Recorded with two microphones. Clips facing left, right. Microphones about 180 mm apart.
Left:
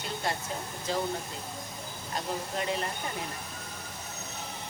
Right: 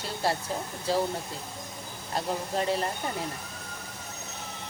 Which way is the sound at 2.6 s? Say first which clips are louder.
Right 4 dB; 35° right (ahead or behind).